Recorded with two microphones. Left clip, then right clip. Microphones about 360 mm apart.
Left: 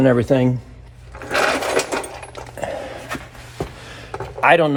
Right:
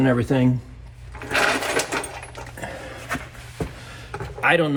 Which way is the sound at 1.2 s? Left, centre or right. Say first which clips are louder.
Left 2 dB; left.